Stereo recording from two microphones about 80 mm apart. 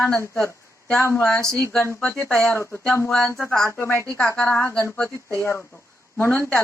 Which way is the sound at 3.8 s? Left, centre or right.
Left.